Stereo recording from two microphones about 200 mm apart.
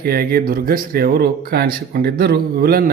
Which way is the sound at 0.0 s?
50° right (ahead or behind).